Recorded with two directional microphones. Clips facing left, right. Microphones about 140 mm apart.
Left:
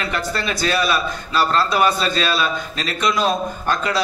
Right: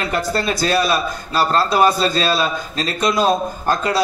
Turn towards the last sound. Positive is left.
turn(degrees=-40)  # may be behind; listen again after turning